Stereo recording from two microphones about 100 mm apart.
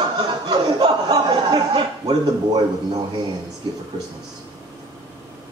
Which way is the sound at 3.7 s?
55° right (ahead or behind).